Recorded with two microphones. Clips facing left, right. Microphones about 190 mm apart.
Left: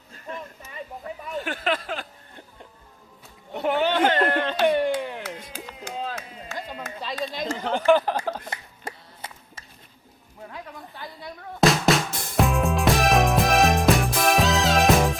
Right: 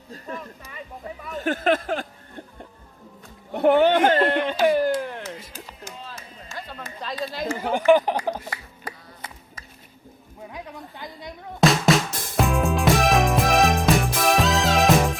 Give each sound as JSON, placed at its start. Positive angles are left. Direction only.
{"t": 1.0, "sound": "speech", "side_deg": -30}
{"t": 1.4, "sound": "speech", "side_deg": -45}
{"t": 3.5, "sound": "speech", "side_deg": -55}
{"t": 4.6, "sound": "a sound", "side_deg": 0}
{"t": 6.0, "sound": "chop", "side_deg": 60}
{"t": 7.0, "sound": "speech", "side_deg": 0}
{"t": 8.4, "sound": "music", "side_deg": 25}
{"t": 10.5, "sound": "a woman's voice", "side_deg": -15}
{"t": 11.6, "sound": "music", "side_deg": 0}